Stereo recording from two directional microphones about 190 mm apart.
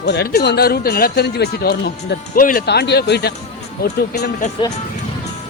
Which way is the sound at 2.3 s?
45° left (ahead or behind).